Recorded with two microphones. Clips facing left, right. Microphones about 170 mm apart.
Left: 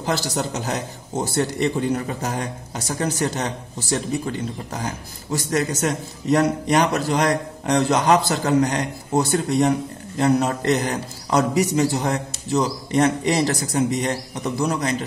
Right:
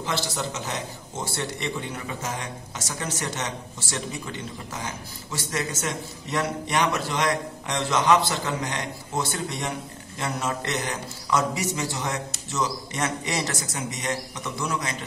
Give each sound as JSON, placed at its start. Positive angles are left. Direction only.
{"t": 0.0, "sound": "a man's voice", "side_deg": 40}